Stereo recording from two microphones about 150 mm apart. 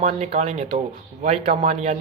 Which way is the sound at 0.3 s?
50° right (ahead or behind).